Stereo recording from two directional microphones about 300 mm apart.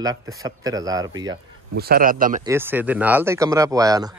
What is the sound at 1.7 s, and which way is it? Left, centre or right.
Speech, right.